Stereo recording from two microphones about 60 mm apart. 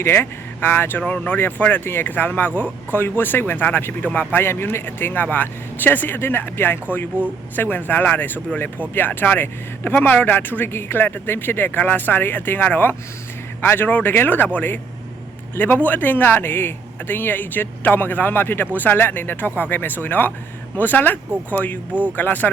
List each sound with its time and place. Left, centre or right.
0.0 s speech: left
1.0 s speech: left
4.4 s speech: left